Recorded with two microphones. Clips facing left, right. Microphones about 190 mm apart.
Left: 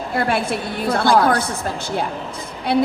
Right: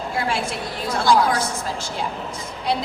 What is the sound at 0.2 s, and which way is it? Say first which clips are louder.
A woman's voice: left 5 dB; 60° left (ahead or behind).